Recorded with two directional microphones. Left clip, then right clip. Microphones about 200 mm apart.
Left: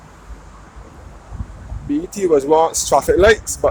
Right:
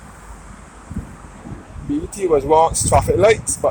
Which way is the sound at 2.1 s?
25° left (ahead or behind).